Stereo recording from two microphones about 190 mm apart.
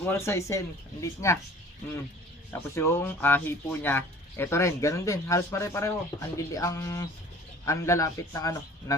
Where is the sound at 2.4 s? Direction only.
15° left (ahead or behind).